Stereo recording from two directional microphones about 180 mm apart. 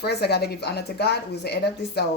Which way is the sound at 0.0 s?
65° left (ahead or behind).